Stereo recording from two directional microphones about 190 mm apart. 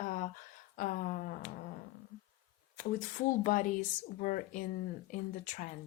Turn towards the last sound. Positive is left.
turn(degrees=40)  # may be behind; listen again after turning